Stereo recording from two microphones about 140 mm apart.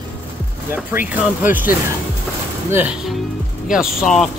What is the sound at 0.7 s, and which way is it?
Speech, 10° right (ahead or behind).